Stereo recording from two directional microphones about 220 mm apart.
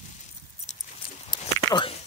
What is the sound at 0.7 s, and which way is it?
Keys jangling, 30° left (ahead or behind).